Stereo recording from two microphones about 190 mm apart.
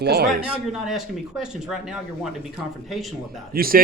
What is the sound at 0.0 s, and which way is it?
Speech, 55° right (ahead or behind).